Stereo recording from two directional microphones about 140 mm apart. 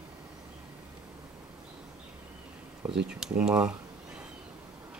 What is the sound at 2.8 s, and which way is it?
Speech, 5° right (ahead or behind).